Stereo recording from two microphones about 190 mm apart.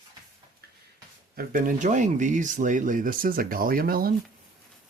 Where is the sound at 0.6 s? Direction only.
55° right (ahead or behind).